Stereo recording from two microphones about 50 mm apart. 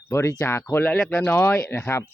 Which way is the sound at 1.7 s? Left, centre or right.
Left.